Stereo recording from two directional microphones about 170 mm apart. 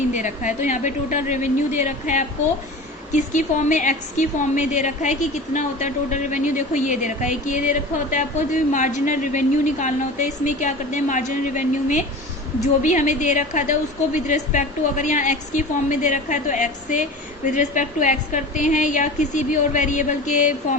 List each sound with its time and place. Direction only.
0.1 s a woman's voice: 45° left (ahead or behind)